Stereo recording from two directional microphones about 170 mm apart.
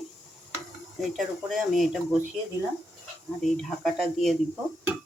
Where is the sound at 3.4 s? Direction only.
Centre (ahead or behind).